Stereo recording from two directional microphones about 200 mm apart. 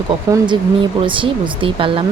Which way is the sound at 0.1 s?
25° right (ahead or behind).